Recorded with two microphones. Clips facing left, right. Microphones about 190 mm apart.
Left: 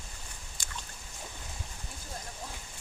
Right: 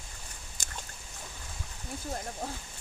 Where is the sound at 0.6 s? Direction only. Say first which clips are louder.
Right 3 dB; 45° right (ahead or behind).